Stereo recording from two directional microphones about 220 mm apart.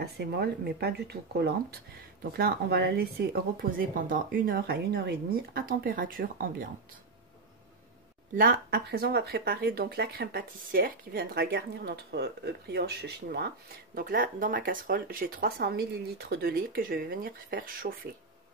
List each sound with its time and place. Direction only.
0.0 s a woman's voice: 45° right (ahead or behind)
8.4 s a woman's voice: 40° right (ahead or behind)